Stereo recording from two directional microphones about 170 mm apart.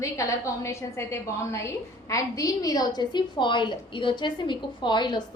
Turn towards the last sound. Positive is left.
turn(degrees=25)  # may be behind; listen again after turning